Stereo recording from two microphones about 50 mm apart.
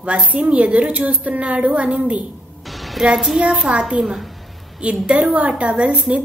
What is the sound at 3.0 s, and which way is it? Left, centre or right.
A child's voice, centre.